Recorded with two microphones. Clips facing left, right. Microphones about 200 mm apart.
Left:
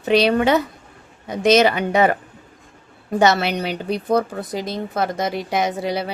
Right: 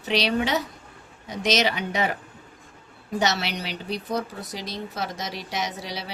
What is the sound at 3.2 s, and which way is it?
Speech, 55° left (ahead or behind).